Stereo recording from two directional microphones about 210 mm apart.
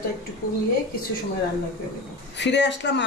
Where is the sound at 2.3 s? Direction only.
55° left (ahead or behind).